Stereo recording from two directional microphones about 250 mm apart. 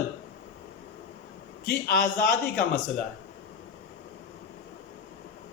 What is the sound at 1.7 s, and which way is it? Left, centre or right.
Speech, left.